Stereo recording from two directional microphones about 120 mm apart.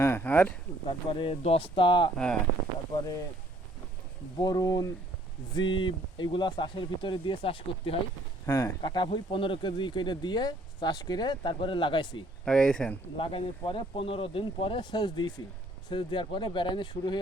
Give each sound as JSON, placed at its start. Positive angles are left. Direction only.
{"t": 0.0, "sound": "a sound", "side_deg": 20}
{"t": 0.9, "sound": "speech", "side_deg": 45}
{"t": 2.1, "sound": "speech", "side_deg": 5}
{"t": 2.9, "sound": "speech", "side_deg": 30}
{"t": 4.4, "sound": "speech", "side_deg": 35}
{"t": 5.5, "sound": "speech", "side_deg": 40}
{"t": 8.4, "sound": "speech", "side_deg": 25}
{"t": 8.8, "sound": "speech", "side_deg": 40}
{"t": 12.5, "sound": "speech", "side_deg": 5}
{"t": 13.1, "sound": "speech", "side_deg": 50}